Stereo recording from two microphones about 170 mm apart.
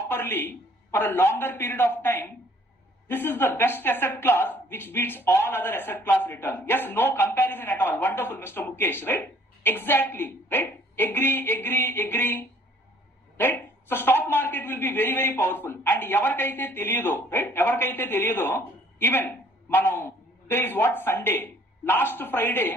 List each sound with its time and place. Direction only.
0.1 s a man's voice: 10° left (ahead or behind)